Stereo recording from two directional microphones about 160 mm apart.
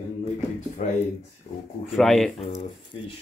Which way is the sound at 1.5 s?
60° left (ahead or behind).